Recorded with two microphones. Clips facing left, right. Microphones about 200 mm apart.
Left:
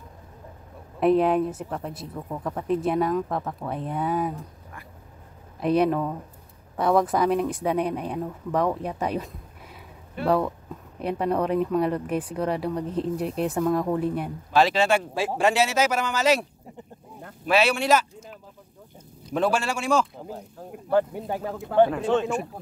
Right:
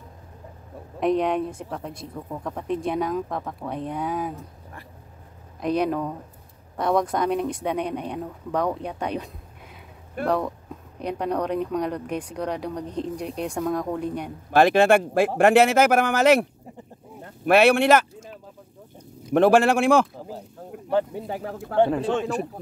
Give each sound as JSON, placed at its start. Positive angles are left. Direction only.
{"t": 0.9, "sound": "speech", "side_deg": 5}
{"t": 5.6, "sound": "speech", "side_deg": 5}
{"t": 14.5, "sound": "speech", "side_deg": -55}
{"t": 17.5, "sound": "speech", "side_deg": -55}
{"t": 19.3, "sound": "speech", "side_deg": -55}
{"t": 21.5, "sound": "speech", "side_deg": 15}